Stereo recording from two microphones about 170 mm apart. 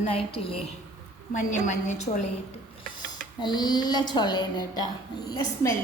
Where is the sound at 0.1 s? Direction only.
35° left (ahead or behind).